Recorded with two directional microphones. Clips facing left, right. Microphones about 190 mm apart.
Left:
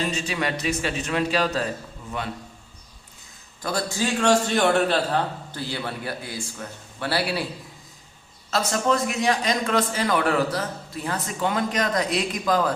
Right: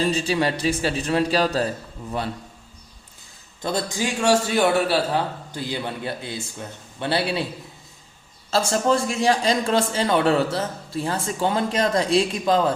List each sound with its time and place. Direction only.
0.0 s a man's voice: 35° right (ahead or behind)
3.6 s a man's voice: 20° right (ahead or behind)
8.4 s a man's voice: 30° right (ahead or behind)